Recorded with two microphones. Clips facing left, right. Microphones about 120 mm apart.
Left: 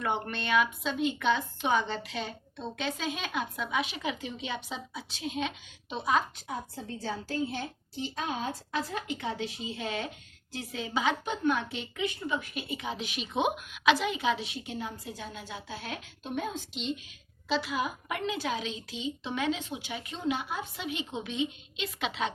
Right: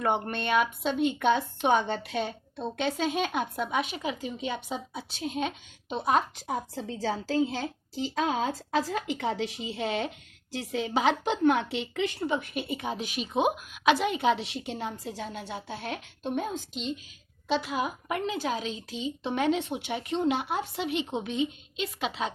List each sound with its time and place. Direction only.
0.0 s a woman's voice: 50° right (ahead or behind)
3.9 s a woman's voice: 35° right (ahead or behind)
6.1 s a woman's voice: 70° right (ahead or behind)
12.4 s a woman's voice: 55° right (ahead or behind); by 15.2 s 75° right (ahead or behind)
15.2 s speech: 60° right (ahead or behind)
16.3 s a woman's voice: 45° right (ahead or behind); by 21.2 s 65° right (ahead or behind)
21.2 s a woman's voice: 45° right (ahead or behind)